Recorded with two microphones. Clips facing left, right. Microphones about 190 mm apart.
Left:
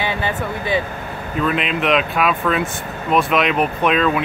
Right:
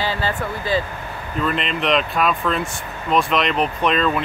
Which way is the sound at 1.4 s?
5° left (ahead or behind).